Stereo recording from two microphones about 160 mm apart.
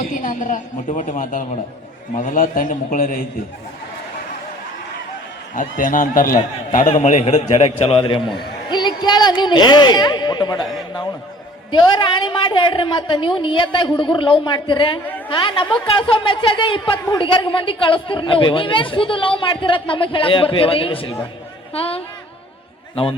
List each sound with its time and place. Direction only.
0.1 s a woman's voice: 60° left (ahead or behind)
5.5 s a woman's voice: 55° left (ahead or behind); by 22.0 s 35° left (ahead or behind)